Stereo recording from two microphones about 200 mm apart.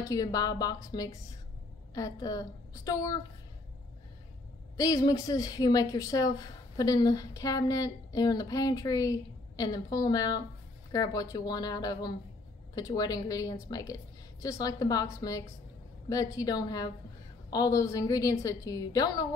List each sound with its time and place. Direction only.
0.0 s a woman's voice: 15° left (ahead or behind)
4.7 s a woman's voice: 20° left (ahead or behind)